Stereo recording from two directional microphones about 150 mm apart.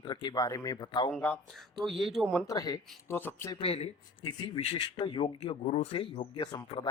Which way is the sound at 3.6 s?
40° left (ahead or behind).